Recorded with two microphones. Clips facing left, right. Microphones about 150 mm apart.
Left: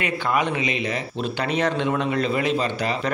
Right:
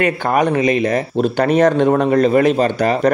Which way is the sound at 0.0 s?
45° right (ahead or behind).